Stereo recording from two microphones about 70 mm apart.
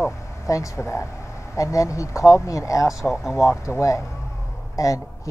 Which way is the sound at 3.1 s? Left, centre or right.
Centre.